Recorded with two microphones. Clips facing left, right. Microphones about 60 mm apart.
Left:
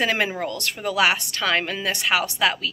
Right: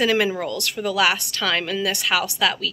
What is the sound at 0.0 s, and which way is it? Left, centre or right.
A woman's voice, left.